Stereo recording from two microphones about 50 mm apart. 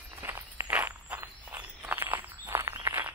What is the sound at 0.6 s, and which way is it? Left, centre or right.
Walk, right.